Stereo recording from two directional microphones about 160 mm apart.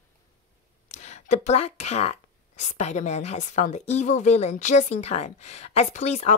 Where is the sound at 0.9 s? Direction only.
45° left (ahead or behind).